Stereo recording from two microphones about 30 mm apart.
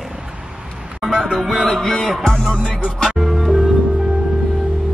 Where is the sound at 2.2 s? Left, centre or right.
Left.